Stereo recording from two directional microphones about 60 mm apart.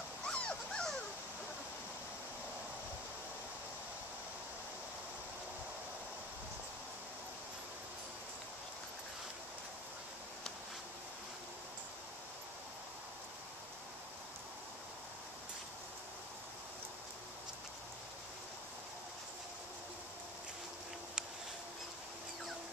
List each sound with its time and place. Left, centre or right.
0.3 s dog: centre